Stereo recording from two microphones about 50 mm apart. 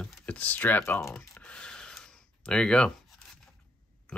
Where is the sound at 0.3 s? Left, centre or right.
Left.